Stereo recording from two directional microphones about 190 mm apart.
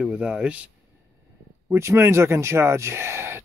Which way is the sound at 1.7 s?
15° right (ahead or behind).